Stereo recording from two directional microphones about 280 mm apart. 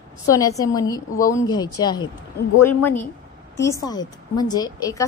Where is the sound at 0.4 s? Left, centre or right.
Centre.